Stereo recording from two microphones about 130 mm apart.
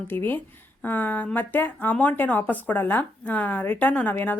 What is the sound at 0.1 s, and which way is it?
Speech, 15° left (ahead or behind).